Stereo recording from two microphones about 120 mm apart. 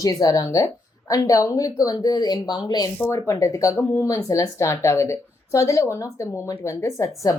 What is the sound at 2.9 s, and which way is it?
A woman's voice, 20° left (ahead or behind).